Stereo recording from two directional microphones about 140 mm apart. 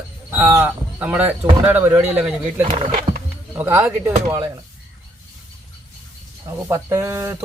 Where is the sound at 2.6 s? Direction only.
45° right (ahead or behind).